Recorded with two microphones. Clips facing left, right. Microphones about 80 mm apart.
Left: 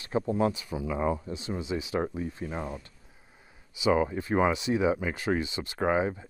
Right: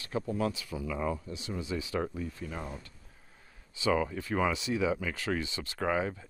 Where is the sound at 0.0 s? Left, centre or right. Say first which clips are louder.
Left 5 dB; left.